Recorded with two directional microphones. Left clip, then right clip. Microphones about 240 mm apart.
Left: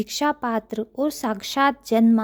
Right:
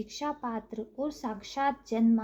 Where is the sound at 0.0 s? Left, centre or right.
Left.